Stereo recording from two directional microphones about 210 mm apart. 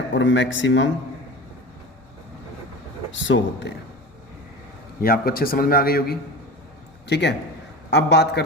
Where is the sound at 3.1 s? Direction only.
60° left (ahead or behind).